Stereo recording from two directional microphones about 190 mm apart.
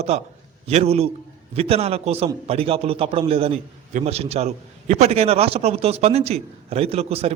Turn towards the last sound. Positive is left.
turn(degrees=-30)  # may be behind; listen again after turning